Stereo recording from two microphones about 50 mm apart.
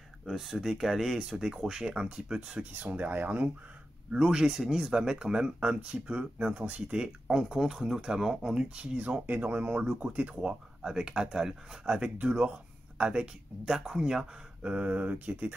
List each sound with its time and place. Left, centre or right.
0.3 s speech: centre
1.7 s speech: centre
2.6 s speech: right
4.1 s speech: centre
8.9 s speech: right
10.3 s speech: centre
13.7 s speech: centre
14.6 s speech: right